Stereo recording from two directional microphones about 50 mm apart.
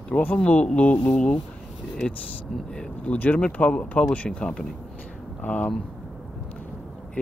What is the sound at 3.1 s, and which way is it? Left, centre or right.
Speech, left.